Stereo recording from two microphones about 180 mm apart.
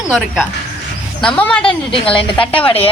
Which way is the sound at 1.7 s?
30° left (ahead or behind).